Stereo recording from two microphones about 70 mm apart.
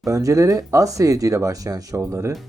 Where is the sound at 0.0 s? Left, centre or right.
Right.